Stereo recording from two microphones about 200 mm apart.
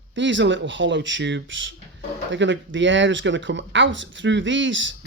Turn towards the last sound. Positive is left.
turn(degrees=-70)  # may be behind; listen again after turning